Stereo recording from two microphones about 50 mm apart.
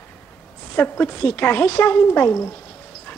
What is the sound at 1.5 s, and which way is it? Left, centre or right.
Speech, left.